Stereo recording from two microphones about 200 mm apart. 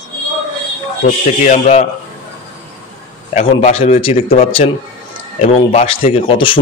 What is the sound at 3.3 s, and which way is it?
A man's voice, 30° left (ahead or behind).